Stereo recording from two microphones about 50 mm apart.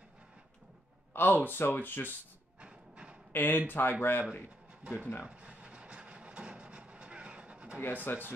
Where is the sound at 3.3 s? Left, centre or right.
Left.